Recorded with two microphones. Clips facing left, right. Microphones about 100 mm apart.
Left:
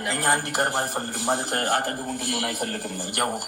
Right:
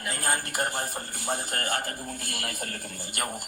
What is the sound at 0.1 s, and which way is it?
Speech, 70° left (ahead or behind).